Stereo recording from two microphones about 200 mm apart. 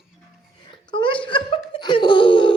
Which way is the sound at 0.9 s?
25° left (ahead or behind).